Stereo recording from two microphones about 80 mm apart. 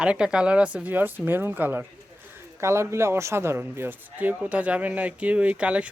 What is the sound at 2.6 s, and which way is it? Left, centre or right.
A man's voice, right.